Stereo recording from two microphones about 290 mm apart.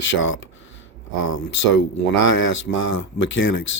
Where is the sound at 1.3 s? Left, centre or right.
Left.